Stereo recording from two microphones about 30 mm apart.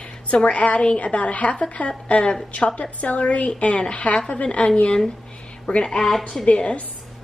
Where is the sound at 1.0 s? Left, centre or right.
Left.